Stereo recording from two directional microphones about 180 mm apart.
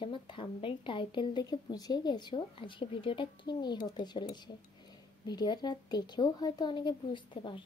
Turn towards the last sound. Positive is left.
turn(degrees=25)  # may be behind; listen again after turning